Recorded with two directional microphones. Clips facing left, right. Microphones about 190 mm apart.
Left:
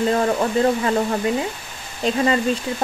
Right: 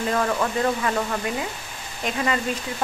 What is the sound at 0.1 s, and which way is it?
Speech, 30° left (ahead or behind).